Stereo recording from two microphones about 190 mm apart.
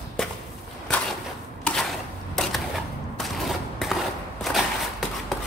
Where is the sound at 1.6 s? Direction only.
5° left (ahead or behind).